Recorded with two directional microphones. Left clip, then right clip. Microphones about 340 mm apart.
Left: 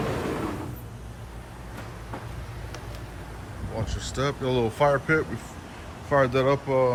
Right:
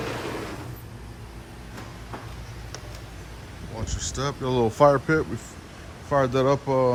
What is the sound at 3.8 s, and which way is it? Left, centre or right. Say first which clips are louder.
Speech: left 1 dB; centre.